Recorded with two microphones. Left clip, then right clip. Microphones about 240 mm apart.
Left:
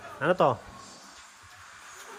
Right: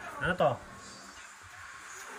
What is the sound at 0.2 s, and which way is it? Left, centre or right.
Speech, centre.